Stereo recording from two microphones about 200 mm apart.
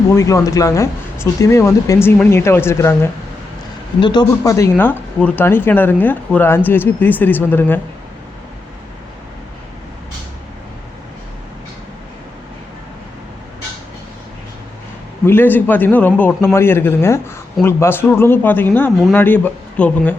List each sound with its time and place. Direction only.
0.2 s speech: 15° left (ahead or behind)
15.3 s speech: 10° left (ahead or behind)